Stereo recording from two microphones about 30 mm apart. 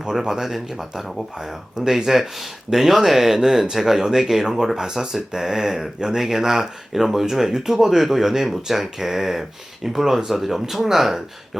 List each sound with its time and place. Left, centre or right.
0.2 s speech: centre